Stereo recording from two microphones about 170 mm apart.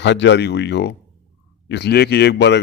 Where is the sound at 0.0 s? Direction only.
90° left.